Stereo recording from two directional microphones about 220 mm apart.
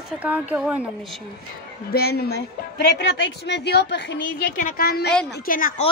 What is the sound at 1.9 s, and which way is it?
A woman's voice, 45° left (ahead or behind).